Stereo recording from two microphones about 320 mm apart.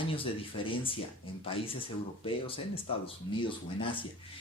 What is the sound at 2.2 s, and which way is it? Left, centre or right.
Speech, centre.